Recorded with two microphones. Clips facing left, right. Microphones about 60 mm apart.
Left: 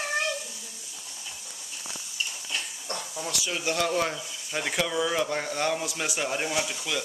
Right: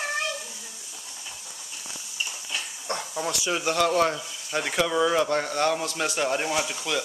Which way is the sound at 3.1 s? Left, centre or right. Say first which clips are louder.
Right 5 dB; right.